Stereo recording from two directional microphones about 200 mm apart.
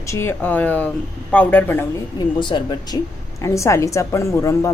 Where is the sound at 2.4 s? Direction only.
25° left (ahead or behind).